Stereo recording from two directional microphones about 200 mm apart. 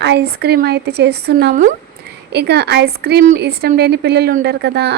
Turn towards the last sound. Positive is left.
turn(degrees=-55)  # may be behind; listen again after turning